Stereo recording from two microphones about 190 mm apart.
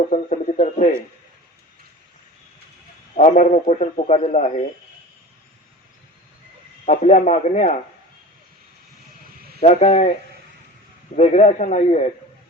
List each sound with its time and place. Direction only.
0.1 s a man's voice: 40° left (ahead or behind)
3.2 s a man's voice: 40° left (ahead or behind)
6.8 s a man's voice: 40° left (ahead or behind)
9.6 s a man's voice: 35° left (ahead or behind)
11.2 s a man's voice: 40° left (ahead or behind)